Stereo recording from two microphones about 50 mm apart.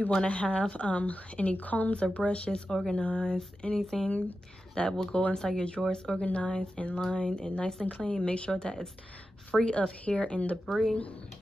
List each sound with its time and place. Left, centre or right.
0.1 s a woman's voice: left
3.6 s a woman's voice: centre
10.7 s speech: centre